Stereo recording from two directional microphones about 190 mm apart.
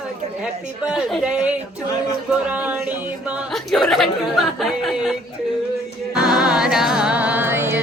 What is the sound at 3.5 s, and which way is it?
Speech, centre (ahead or behind).